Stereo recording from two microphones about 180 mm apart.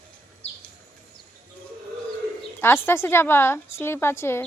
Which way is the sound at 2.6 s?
15° left (ahead or behind).